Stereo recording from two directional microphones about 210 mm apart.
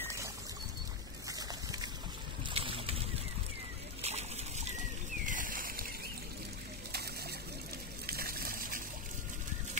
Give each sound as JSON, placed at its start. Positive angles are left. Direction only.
{"t": 2.5, "sound": "boat", "side_deg": -25}
{"t": 4.0, "sound": "a sound", "side_deg": -30}
{"t": 6.9, "sound": "water", "side_deg": -50}